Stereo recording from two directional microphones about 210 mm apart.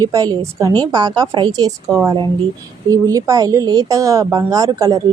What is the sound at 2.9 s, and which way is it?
Speech, 15° right (ahead or behind).